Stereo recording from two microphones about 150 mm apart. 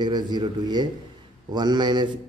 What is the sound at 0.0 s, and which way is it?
Speech, 30° right (ahead or behind).